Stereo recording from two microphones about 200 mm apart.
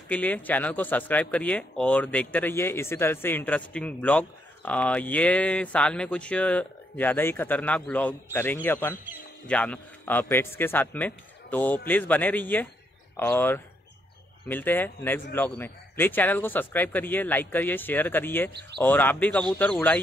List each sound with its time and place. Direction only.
0.1 s speech: 10° left (ahead or behind)
18.5 s speech: 55° right (ahead or behind)
18.8 s speech: 10° left (ahead or behind)